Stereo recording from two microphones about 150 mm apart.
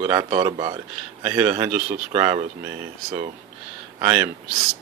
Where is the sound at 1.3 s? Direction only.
15° right (ahead or behind).